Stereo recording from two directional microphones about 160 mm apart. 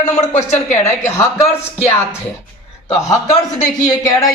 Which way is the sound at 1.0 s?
20° left (ahead or behind).